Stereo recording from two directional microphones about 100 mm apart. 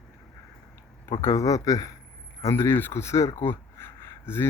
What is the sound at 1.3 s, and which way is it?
Speech, 35° left (ahead or behind).